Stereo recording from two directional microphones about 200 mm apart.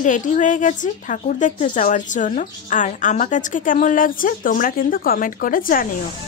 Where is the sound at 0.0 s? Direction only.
40° left (ahead or behind).